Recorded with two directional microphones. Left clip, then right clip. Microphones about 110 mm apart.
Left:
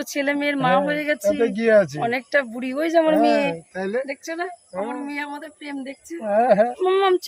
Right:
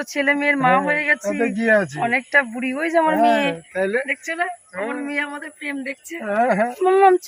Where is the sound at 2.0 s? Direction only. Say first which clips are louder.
Right 3 dB; 75° left (ahead or behind).